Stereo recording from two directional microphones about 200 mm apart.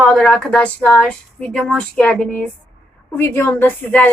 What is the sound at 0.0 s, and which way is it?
A woman's voice, centre (ahead or behind).